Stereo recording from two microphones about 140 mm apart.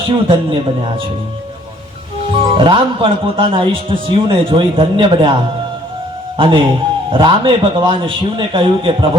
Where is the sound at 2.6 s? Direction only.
35° right (ahead or behind).